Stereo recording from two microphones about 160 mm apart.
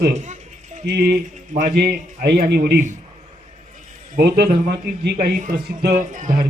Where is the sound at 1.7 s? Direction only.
80° right.